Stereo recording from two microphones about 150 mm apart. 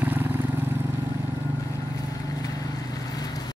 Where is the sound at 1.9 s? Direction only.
25° left (ahead or behind).